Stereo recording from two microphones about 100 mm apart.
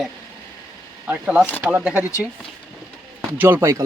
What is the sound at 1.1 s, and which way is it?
Speech, 10° right (ahead or behind).